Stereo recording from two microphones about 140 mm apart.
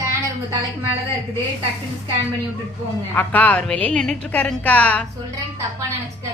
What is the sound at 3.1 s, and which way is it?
A woman's voice, 10° left (ahead or behind).